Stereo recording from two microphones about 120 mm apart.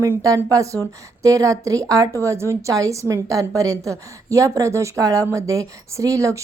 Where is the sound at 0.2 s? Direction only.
25° right (ahead or behind).